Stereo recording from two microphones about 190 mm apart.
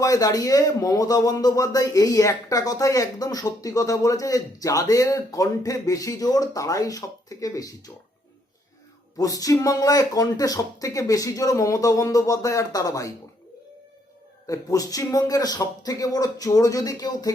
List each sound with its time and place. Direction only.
0.0 s speech: 20° left (ahead or behind)
9.1 s speech: 20° left (ahead or behind)
14.4 s speech: 20° left (ahead or behind)